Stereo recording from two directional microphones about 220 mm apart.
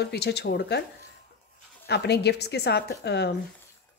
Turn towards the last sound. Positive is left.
turn(degrees=50)  # may be behind; listen again after turning